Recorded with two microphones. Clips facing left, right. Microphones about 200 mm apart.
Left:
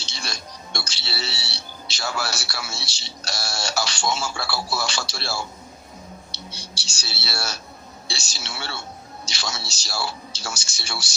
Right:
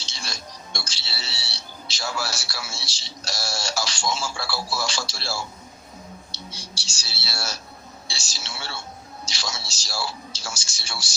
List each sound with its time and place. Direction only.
0.0 s speech: 65° left (ahead or behind)
6.3 s a sound: 65° left (ahead or behind)
8.0 s a woman's voice: 65° left (ahead or behind)